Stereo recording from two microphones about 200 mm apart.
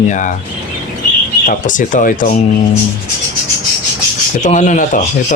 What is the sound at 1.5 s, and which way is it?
Speech, 40° left (ahead or behind).